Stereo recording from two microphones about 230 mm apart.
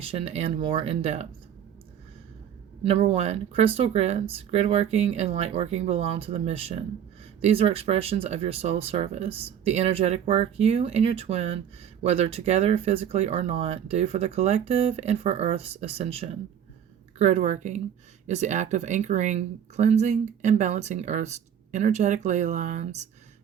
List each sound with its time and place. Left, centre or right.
0.0 s speech: right
2.8 s speech: right